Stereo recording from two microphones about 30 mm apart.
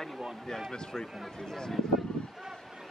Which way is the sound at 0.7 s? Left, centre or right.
Centre.